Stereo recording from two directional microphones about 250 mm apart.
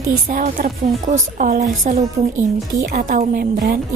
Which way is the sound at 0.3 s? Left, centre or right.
Right.